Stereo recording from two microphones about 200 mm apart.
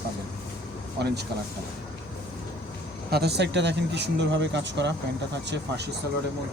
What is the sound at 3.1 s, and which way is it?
Speech, 55° right (ahead or behind).